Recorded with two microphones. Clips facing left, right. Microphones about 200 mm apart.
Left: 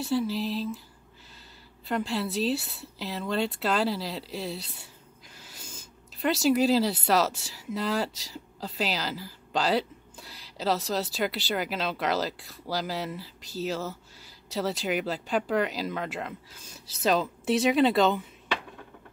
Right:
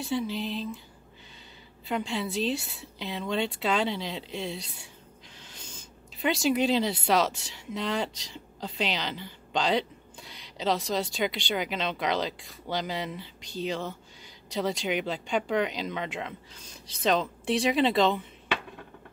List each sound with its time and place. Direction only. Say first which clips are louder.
0.0 s speech: left 3 dB; 5° left (ahead or behind)
1.9 s speech: left 1 dB; centre (ahead or behind)